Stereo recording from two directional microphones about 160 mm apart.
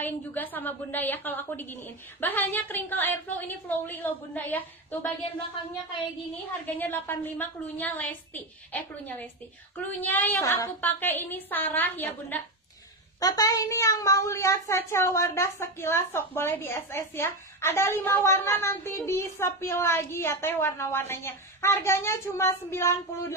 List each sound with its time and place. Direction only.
0.0 s a woman's voice: 10° left (ahead or behind)
6.6 s a woman's voice: 10° left (ahead or behind)
13.2 s a woman's voice: 20° left (ahead or behind)